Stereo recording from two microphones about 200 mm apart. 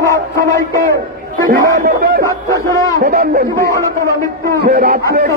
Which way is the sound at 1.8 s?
55° right (ahead or behind).